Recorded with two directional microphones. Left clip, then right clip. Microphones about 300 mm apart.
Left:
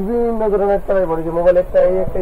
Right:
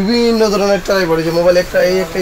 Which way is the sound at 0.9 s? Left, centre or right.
Right.